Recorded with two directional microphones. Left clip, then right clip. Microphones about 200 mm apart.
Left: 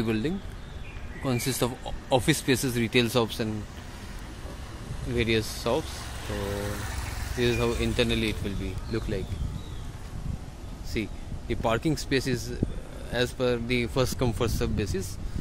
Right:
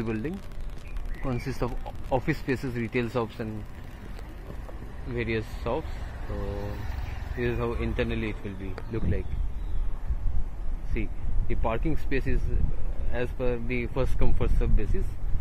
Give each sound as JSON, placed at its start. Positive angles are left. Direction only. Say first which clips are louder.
{"t": 0.0, "sound": "speech", "louder": "left 3 dB", "side_deg": 20}
{"t": 5.1, "sound": "speech", "louder": "left 4 dB", "side_deg": 20}
{"t": 7.3, "sound": "speech", "louder": "left 4 dB", "side_deg": 15}
{"t": 10.9, "sound": "speech", "louder": "left 4 dB", "side_deg": 15}